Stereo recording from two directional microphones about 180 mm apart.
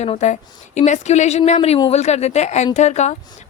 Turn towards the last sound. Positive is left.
turn(degrees=40)  # may be behind; listen again after turning